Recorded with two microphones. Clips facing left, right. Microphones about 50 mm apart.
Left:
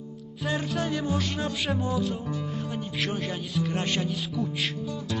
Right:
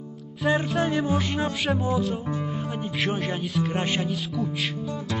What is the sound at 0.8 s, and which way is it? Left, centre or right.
Speech, right.